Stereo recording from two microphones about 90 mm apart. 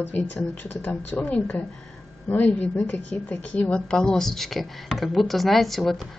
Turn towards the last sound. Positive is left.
turn(degrees=0)  # may be behind; listen again after turning